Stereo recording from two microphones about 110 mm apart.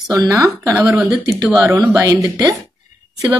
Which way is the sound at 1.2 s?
30° right (ahead or behind).